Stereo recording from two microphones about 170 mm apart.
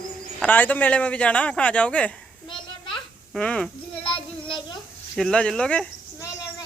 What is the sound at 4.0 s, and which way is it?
Child singing, 30° left (ahead or behind).